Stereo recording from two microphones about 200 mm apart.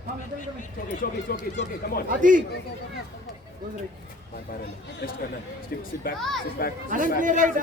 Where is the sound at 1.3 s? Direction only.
50° left (ahead or behind).